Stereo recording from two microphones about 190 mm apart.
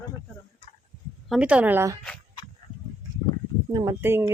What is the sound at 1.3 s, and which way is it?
Speech, 5° right (ahead or behind).